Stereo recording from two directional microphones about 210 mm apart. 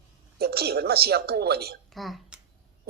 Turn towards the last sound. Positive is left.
turn(degrees=-50)  # may be behind; listen again after turning